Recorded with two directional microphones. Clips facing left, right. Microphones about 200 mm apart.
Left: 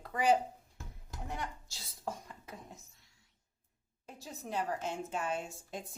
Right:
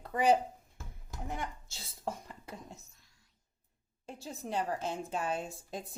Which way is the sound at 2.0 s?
25° right (ahead or behind).